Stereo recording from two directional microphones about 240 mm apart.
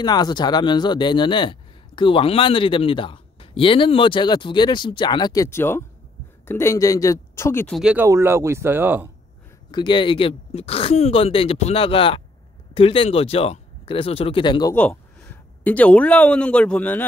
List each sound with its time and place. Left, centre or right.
0.0 s a man's voice: centre
9.7 s a man's voice: centre